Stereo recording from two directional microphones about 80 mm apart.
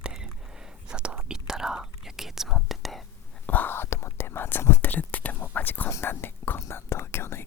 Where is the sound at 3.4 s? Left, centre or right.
Left.